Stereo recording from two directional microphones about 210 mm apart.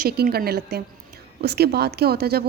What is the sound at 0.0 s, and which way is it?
Speech, 50° right (ahead or behind).